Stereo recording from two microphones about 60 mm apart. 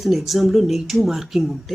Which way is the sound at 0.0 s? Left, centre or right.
Centre.